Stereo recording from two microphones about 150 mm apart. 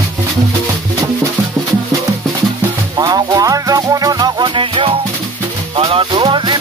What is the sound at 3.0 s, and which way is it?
Music, 25° right (ahead or behind).